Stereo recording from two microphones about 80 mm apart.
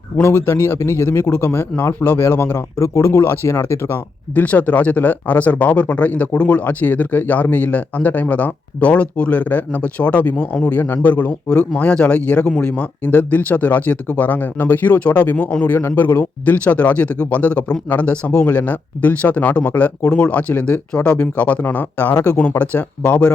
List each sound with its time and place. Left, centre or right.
0.2 s speech: left
2.7 s speech: left
4.4 s speech: centre